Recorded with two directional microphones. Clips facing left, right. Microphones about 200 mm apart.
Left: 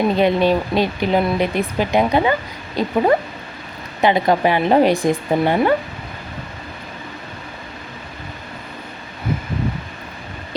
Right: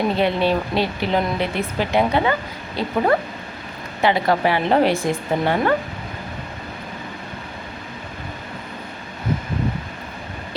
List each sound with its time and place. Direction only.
0.2 s speech: 15° left (ahead or behind)
4.0 s speech: 20° left (ahead or behind)